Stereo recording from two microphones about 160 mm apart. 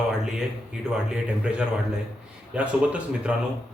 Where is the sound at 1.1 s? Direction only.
5° right (ahead or behind).